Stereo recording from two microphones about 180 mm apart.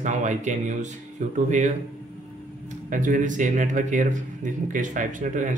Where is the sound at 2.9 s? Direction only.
45° right (ahead or behind).